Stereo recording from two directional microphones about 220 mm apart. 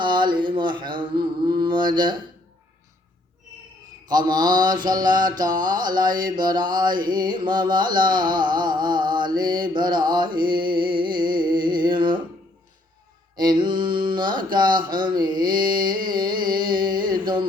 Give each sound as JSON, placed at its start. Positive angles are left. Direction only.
{"t": 0.0, "sound": "a sound", "side_deg": -20}
{"t": 1.2, "sound": "mantra", "side_deg": -20}
{"t": 4.1, "sound": "mantra", "side_deg": -20}
{"t": 13.3, "sound": "mantra", "side_deg": -20}
{"t": 15.5, "sound": "carnatic music", "side_deg": -40}
{"t": 16.0, "sound": "music", "side_deg": -20}